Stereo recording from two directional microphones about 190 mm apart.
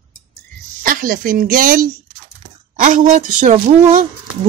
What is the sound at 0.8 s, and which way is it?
Speech, 50° right (ahead or behind).